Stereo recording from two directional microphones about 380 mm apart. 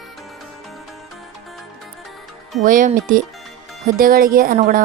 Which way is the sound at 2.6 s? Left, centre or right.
Right.